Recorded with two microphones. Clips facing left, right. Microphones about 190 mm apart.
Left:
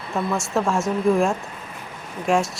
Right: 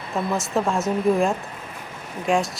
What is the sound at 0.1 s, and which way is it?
Speech, centre (ahead or behind).